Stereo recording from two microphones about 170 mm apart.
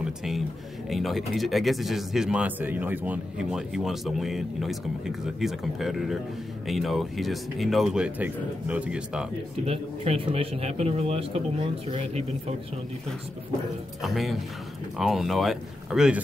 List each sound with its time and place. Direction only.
0.0 s a sound: centre (ahead or behind)
0.8 s speech: centre (ahead or behind)
9.7 s a man's voice: 35° right (ahead or behind)
14.0 s speech: centre (ahead or behind)